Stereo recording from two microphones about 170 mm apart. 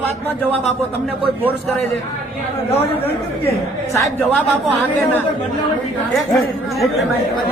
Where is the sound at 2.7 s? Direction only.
35° left (ahead or behind).